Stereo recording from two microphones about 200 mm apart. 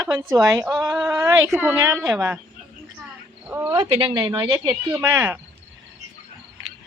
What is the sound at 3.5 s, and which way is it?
Speech, 10° right (ahead or behind).